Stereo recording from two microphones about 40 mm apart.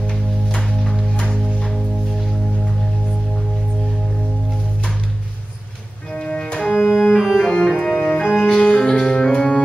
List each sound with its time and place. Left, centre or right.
1.3 s music: centre
6.1 s music: left
6.7 s cello: centre
7.2 s organ: centre
7.8 s organ: left
8.5 s music: centre